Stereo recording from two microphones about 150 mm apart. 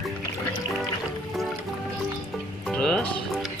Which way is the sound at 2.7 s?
5° left (ahead or behind).